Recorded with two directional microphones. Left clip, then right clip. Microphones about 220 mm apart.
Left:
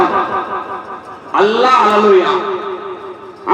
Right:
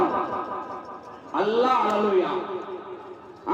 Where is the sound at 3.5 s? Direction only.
45° right (ahead or behind).